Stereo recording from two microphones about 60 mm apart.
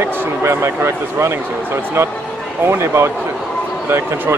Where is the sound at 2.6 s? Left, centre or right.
Right.